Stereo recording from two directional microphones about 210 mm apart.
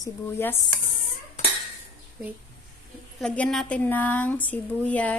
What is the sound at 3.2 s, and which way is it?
Speech, centre (ahead or behind).